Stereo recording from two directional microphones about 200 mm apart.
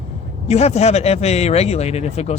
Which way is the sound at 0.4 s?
30° left (ahead or behind).